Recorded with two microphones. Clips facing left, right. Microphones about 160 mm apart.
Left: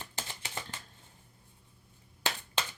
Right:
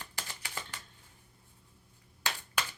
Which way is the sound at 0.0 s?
20° left (ahead or behind).